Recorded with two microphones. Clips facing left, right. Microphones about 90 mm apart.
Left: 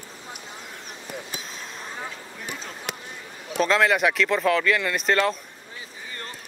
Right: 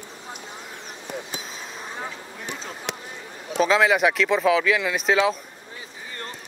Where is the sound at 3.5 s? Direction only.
Centre (ahead or behind).